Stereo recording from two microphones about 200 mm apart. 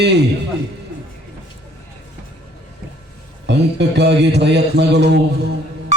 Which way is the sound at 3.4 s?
60° right (ahead or behind).